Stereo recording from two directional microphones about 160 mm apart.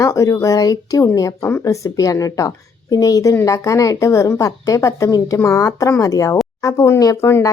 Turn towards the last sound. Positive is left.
turn(degrees=15)  # may be behind; listen again after turning